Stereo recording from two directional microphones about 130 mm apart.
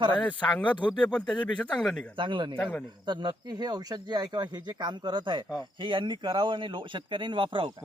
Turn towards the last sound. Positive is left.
turn(degrees=-40)  # may be behind; listen again after turning